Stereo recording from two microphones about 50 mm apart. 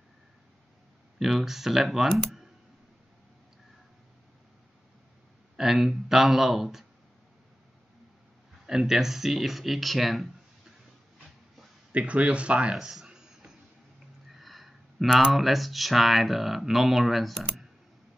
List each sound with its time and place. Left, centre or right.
1.2 s speech: centre
5.6 s speech: centre
8.6 s speech: centre
11.9 s speech: right
12.9 s a sound: centre
14.4 s speech: centre